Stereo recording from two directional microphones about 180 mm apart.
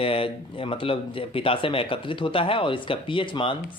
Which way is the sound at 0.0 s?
30° left (ahead or behind).